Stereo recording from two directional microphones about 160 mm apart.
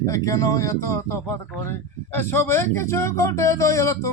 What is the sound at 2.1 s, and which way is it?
Speech, 15° left (ahead or behind).